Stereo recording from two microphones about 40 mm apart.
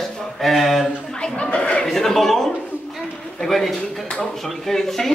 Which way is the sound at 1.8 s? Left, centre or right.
Centre.